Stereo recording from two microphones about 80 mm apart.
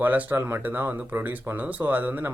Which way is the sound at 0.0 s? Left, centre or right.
Right.